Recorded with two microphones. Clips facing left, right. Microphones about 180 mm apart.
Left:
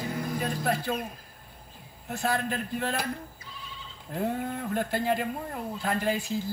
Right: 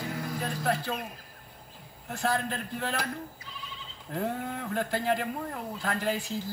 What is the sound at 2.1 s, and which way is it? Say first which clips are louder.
Speech: left 1 dB; 10° left (ahead or behind).